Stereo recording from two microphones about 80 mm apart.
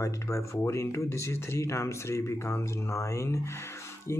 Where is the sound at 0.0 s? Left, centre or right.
Left.